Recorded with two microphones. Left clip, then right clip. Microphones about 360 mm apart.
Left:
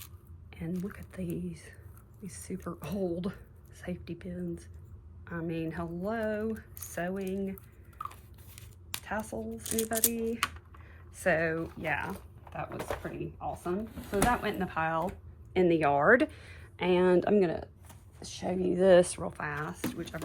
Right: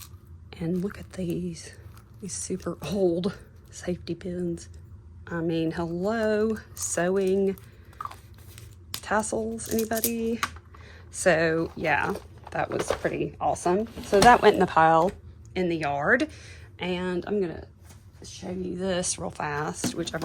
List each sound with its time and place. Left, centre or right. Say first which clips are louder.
0.5 s a woman's voice: right 9 dB; centre
9.0 s a woman's voice: right 11 dB; centre
15.5 s speech: left 1 dB; centre
17.0 s speech: left 4 dB; centre